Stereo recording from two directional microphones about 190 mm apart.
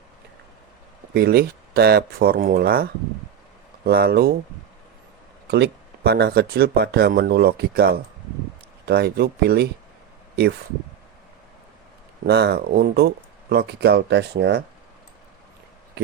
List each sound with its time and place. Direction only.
1.1 s speech: 55° right (ahead or behind)
5.5 s speech: 65° right (ahead or behind)
12.2 s speech: 60° right (ahead or behind)